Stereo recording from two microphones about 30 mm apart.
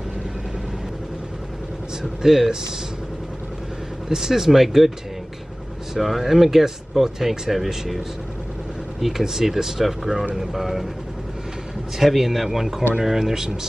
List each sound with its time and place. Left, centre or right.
2.2 s speech: centre
4.1 s speech: centre
5.9 s speech: centre
9.0 s speech: centre
12.0 s speech: centre